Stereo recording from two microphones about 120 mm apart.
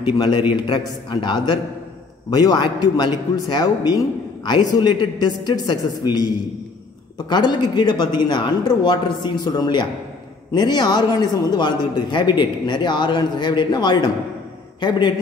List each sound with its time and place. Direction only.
0.0 s a man's voice: 40° left (ahead or behind)